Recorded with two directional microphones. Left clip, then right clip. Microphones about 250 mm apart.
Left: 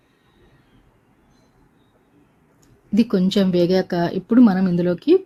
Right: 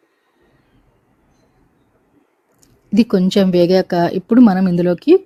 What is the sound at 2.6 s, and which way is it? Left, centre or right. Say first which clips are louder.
Speech: right 4 dB; right.